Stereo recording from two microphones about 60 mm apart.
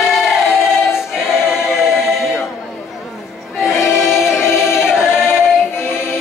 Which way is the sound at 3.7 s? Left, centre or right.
Left.